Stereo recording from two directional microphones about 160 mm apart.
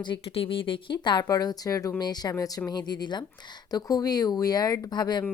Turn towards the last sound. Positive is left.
turn(degrees=25)  # may be behind; listen again after turning